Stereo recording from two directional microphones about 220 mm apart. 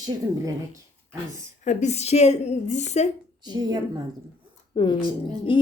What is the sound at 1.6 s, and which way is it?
A woman's voice, 30° left (ahead or behind).